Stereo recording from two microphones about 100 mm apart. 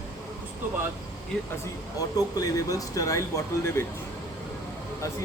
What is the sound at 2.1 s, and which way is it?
Speech, 40° left (ahead or behind).